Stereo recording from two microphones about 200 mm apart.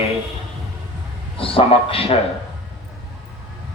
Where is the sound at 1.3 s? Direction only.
30° left (ahead or behind).